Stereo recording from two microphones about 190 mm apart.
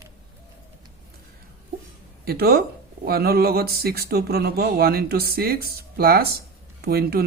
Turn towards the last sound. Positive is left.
turn(degrees=-55)  # may be behind; listen again after turning